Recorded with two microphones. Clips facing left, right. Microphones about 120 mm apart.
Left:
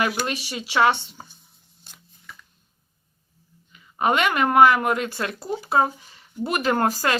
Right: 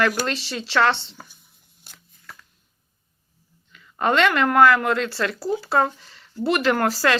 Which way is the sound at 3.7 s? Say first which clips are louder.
Right 1 dB; 20° left (ahead or behind).